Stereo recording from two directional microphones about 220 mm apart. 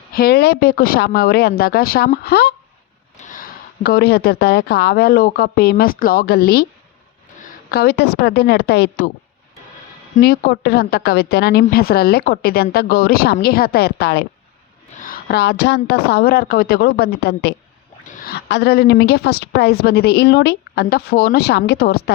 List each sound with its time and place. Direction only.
0.2 s a woman's voice: 45° left (ahead or behind)
7.7 s a woman's voice: 45° left (ahead or behind)
10.2 s a woman's voice: 45° left (ahead or behind)